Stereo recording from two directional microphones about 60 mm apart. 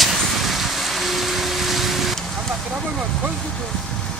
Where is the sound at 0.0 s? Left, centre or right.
Centre.